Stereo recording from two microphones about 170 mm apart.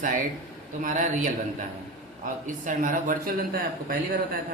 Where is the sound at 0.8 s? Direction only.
50° right (ahead or behind).